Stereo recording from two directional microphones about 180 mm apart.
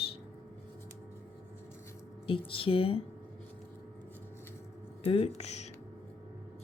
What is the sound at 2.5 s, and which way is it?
Speech, 30° left (ahead or behind).